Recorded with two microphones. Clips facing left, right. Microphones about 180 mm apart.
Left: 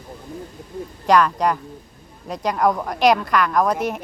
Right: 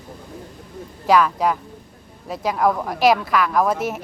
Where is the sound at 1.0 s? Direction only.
5° right (ahead or behind).